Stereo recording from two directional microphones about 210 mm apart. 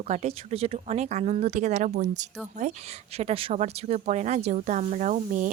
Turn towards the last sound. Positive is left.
turn(degrees=-35)  # may be behind; listen again after turning